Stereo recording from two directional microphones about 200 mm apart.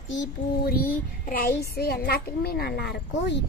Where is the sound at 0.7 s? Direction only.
45° left (ahead or behind).